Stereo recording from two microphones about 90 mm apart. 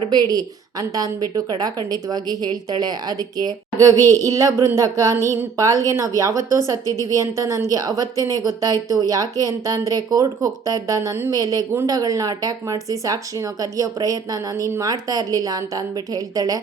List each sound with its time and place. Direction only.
0.1 s a woman's voice: 50° right (ahead or behind); by 11.3 s 30° right (ahead or behind)
11.3 s a woman's voice: 45° right (ahead or behind)